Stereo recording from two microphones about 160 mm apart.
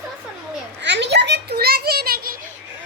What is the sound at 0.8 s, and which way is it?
A child's voice, 90° right.